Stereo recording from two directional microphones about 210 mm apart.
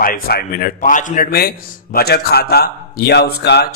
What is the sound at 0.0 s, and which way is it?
Speech, 45° left (ahead or behind).